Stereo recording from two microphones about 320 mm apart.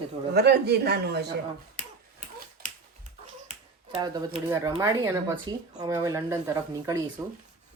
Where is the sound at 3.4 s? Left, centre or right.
Centre.